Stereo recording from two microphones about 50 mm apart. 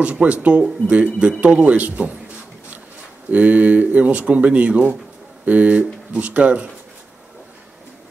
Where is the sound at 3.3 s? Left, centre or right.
Right.